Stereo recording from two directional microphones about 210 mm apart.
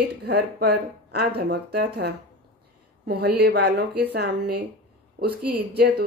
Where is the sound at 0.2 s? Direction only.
50° right (ahead or behind).